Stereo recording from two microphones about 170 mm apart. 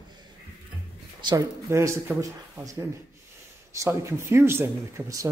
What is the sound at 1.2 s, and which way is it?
Speech, 20° right (ahead or behind).